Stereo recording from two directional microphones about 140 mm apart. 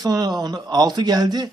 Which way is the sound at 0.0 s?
30° right (ahead or behind).